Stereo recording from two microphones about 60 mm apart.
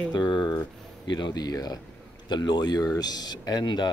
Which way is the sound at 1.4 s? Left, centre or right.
Left.